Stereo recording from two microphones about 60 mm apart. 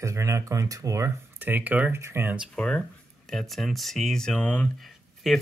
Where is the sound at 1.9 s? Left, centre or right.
Right.